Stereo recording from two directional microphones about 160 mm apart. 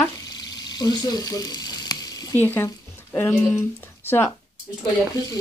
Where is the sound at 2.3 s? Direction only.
15° left (ahead or behind).